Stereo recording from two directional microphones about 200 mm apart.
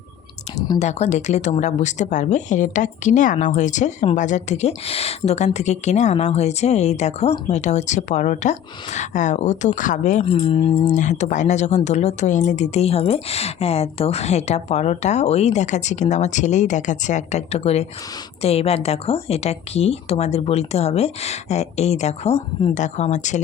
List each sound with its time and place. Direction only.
0.8 s speech: 35° left (ahead or behind)